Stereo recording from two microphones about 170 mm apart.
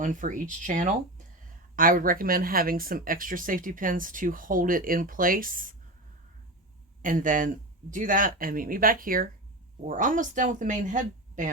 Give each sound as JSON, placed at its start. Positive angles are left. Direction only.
{"t": 0.0, "sound": "speech", "side_deg": -50}
{"t": 7.0, "sound": "speech", "side_deg": -50}